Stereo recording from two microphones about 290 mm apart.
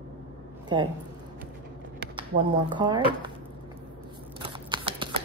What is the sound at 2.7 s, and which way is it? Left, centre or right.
Speech, centre.